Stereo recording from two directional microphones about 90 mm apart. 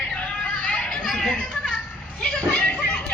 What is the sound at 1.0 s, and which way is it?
Children playing, 5° left (ahead or behind).